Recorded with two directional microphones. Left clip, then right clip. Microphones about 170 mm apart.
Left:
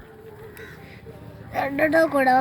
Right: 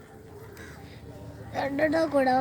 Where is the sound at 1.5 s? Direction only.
10° left (ahead or behind).